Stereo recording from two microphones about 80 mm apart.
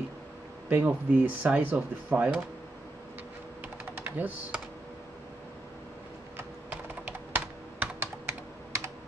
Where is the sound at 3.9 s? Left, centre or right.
Right.